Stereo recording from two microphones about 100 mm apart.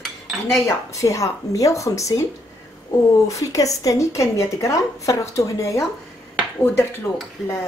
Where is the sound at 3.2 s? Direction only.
35° left (ahead or behind).